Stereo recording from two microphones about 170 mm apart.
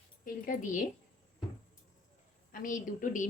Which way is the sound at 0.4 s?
50° left (ahead or behind).